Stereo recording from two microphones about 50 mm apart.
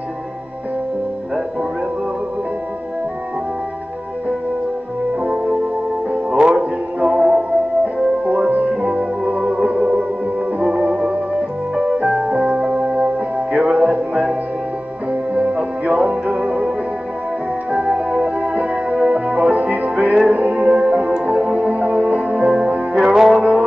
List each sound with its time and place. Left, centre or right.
5.2 s music: right
8.5 s music: right
8.8 s music: centre
15.3 s music: right
17.6 s music: right
23.0 s music: centre
23.3 s music: right